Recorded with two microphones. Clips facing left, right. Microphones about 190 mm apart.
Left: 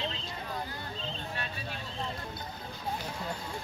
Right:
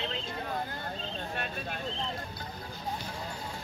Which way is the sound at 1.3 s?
55° right (ahead or behind).